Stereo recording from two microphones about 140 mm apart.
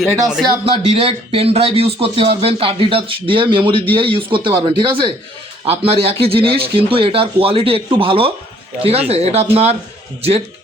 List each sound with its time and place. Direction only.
0.0 s speech: centre (ahead or behind)
0.4 s speech: 40° right (ahead or behind)